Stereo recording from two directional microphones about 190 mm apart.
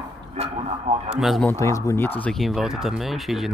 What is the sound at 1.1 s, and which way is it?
Speech, centre (ahead or behind).